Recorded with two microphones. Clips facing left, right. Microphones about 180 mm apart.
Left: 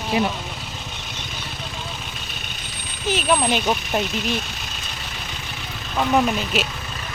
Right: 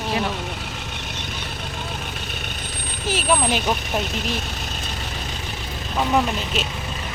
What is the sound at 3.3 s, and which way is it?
Speech, centre (ahead or behind).